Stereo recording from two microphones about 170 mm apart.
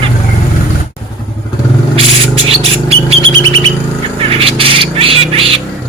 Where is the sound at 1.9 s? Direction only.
35° right (ahead or behind).